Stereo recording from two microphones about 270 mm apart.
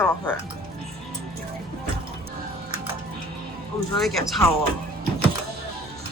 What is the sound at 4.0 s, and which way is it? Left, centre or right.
Speech, centre.